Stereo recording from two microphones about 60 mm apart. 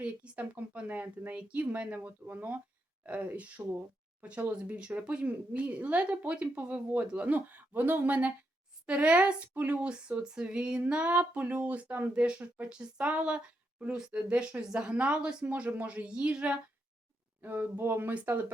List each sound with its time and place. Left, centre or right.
0.0 s speech: right
1.4 s speech: right
12.1 s speech: centre
17.4 s speech: right